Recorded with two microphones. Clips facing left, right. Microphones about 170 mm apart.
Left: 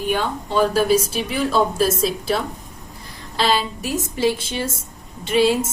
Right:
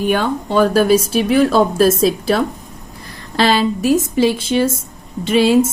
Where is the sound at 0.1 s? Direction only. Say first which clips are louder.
Right 2 dB; 65° right (ahead or behind).